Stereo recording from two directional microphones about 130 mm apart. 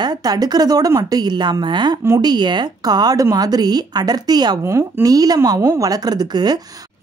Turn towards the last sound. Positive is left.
turn(degrees=-30)  # may be behind; listen again after turning